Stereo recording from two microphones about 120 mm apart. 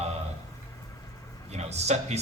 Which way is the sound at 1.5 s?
65° right (ahead or behind).